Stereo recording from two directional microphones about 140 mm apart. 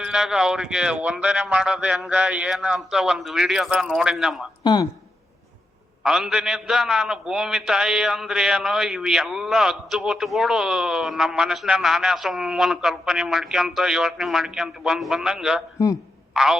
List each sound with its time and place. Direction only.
0.0 s a man's voice: 5° right (ahead or behind)
4.6 s speech: 30° left (ahead or behind)
6.0 s a man's voice: 5° right (ahead or behind)